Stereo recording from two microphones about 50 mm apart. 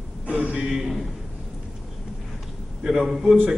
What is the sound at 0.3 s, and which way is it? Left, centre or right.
Speech, right.